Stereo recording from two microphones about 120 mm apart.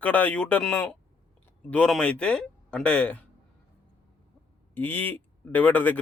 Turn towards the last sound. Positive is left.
turn(degrees=15)  # may be behind; listen again after turning